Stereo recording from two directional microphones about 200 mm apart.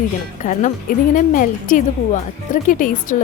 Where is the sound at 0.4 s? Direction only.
40° left (ahead or behind).